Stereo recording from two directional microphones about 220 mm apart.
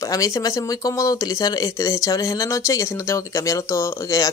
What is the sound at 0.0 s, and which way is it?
Speech, 15° left (ahead or behind).